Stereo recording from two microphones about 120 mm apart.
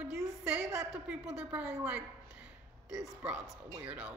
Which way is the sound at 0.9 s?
10° right (ahead or behind).